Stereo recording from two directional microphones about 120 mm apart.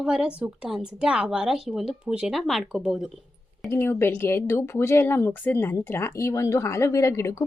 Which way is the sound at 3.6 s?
20° left (ahead or behind).